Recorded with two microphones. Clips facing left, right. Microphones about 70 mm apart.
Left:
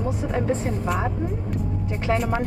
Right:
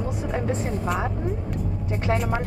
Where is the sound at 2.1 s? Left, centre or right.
Centre.